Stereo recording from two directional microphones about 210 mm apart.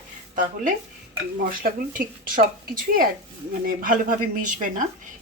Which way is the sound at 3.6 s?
40° right (ahead or behind).